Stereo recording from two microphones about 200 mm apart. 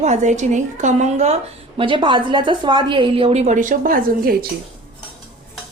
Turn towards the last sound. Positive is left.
turn(degrees=-45)  # may be behind; listen again after turning